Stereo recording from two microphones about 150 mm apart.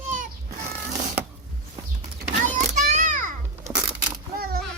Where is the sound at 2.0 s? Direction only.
55° right (ahead or behind).